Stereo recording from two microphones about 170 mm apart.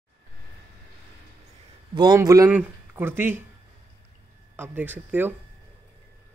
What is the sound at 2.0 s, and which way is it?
Speech, 20° right (ahead or behind).